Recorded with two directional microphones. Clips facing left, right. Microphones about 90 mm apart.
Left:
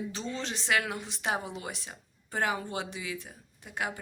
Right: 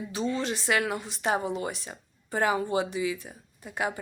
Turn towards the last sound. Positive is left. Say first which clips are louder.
# right 4 dB
turn(degrees=-5)  # may be behind; listen again after turning